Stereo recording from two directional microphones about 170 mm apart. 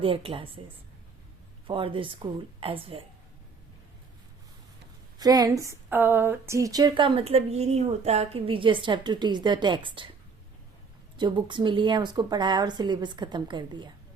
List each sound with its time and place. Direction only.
0.0 s a woman's voice: 30° right (ahead or behind)
1.6 s a woman's voice: 30° right (ahead or behind)
5.2 s speech: 20° right (ahead or behind)
11.2 s speech: 30° right (ahead or behind)